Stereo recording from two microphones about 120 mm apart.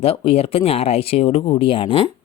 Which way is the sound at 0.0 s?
55° left (ahead or behind).